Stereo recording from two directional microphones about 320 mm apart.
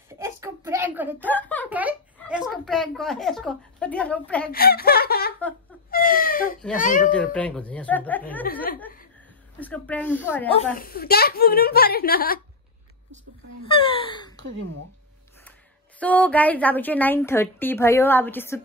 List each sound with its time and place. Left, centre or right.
0.2 s a sound: centre
1.3 s a woman's voice: centre
4.5 s speech: left
5.9 s a sound: left
6.8 s a child's voice: left
7.3 s a woman's voice: centre
9.6 s a woman's voice: centre
10.5 s a child's voice: left
13.7 s a sound: centre
14.6 s speech: right
16.0 s a woman's voice: centre